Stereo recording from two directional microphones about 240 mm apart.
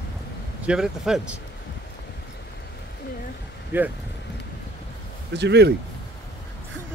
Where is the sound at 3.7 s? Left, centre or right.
Centre.